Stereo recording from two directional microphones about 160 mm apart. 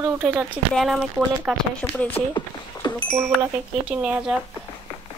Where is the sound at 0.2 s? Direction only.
5° right (ahead or behind).